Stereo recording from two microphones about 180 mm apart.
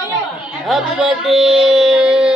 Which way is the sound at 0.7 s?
5° right (ahead or behind).